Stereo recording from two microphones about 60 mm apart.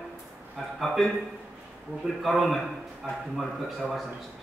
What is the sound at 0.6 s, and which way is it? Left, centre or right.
Speech, centre.